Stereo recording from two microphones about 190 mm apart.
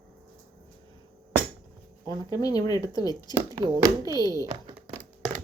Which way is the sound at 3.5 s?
20° right (ahead or behind).